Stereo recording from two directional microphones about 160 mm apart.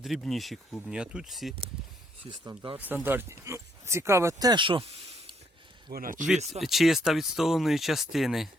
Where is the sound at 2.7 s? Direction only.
10° right (ahead or behind); by 5.3 s 35° right (ahead or behind).